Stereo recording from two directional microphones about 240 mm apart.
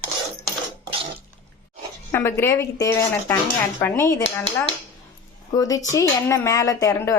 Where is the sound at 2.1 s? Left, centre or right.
Centre.